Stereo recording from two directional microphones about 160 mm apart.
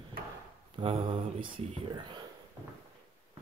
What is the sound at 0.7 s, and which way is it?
Speech, 30° right (ahead or behind).